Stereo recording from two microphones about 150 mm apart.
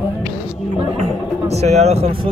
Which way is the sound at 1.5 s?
45° right (ahead or behind).